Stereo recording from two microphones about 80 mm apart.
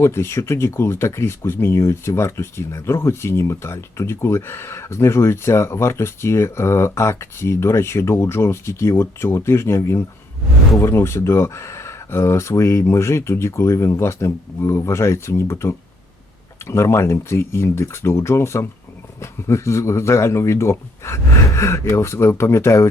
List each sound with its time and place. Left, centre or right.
0.0 s speech: left